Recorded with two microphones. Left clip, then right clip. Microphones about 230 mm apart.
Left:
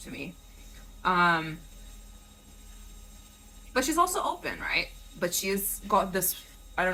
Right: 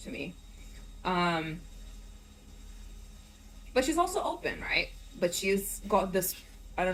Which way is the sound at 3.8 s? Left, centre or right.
Left.